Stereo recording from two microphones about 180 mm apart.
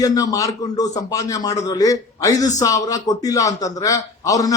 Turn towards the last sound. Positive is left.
turn(degrees=20)  # may be behind; listen again after turning